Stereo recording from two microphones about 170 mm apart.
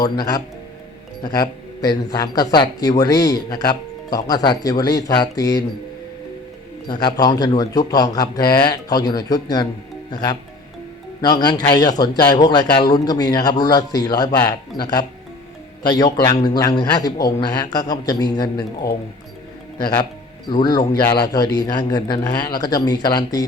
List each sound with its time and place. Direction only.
0.0 s speech: 20° left (ahead or behind)
6.8 s speech: 25° left (ahead or behind)
11.2 s a man's voice: 25° left (ahead or behind)
20.5 s speech: 25° left (ahead or behind)